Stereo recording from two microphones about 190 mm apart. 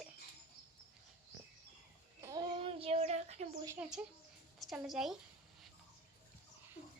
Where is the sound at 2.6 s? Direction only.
30° right (ahead or behind).